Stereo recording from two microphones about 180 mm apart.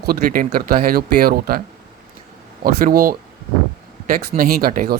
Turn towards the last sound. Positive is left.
turn(degrees=-55)  # may be behind; listen again after turning